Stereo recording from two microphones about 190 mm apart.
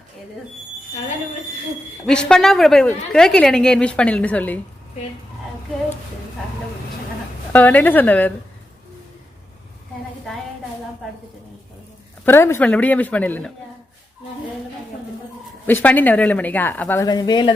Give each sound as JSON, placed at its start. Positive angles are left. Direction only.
{"t": 2.0, "sound": "a woman's voice", "side_deg": 5}
{"t": 7.5, "sound": "speech", "side_deg": 10}
{"t": 12.2, "sound": "speech", "side_deg": 10}
{"t": 15.6, "sound": "speech", "side_deg": 10}
{"t": 17.1, "sound": "speech", "side_deg": 20}